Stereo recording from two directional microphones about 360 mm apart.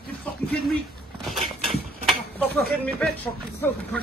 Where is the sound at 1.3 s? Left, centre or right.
Centre.